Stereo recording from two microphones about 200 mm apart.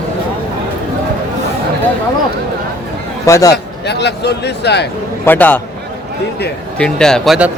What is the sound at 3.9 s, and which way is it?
Speech, 60° left (ahead or behind).